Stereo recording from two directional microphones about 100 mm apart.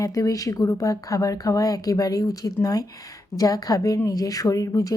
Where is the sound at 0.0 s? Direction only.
35° left (ahead or behind).